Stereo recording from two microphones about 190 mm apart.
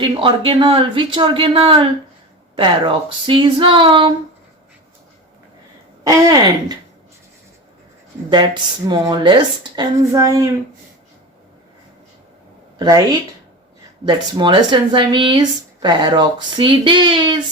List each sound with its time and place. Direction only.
0.0 s speech: 25° right (ahead or behind)
6.1 s speech: 20° right (ahead or behind)
8.9 s speech: 20° right (ahead or behind)
12.8 s speech: 20° right (ahead or behind)